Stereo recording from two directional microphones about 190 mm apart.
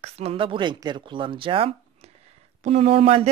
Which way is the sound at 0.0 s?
30° right (ahead or behind).